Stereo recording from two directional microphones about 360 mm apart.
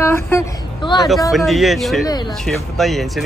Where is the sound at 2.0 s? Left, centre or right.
Centre.